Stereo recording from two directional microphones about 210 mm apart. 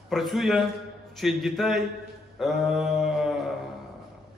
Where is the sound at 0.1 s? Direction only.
Centre (ahead or behind).